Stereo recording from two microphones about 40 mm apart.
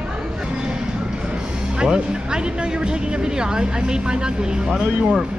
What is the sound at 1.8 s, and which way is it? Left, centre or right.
Speech, right.